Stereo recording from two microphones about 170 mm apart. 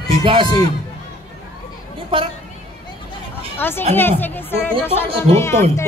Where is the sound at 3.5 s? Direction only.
15° left (ahead or behind).